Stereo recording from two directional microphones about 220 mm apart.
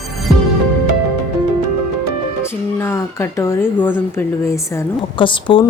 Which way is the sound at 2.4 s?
10° left (ahead or behind).